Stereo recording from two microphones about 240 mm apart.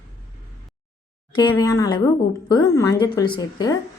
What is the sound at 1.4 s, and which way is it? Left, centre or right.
A woman's voice, centre.